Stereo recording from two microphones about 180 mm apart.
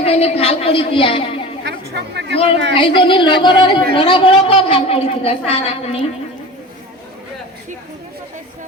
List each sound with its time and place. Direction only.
0.0 s a woman's voice: 35° left (ahead or behind)
1.6 s chatter: 70° right (ahead or behind)
2.3 s a woman's voice: 30° left (ahead or behind)